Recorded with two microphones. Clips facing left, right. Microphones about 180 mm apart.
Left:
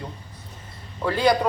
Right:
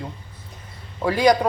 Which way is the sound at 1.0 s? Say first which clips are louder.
Right 3 dB; 15° right (ahead or behind).